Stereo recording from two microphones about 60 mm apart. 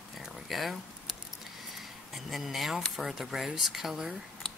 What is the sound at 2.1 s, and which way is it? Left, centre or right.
Speech, centre.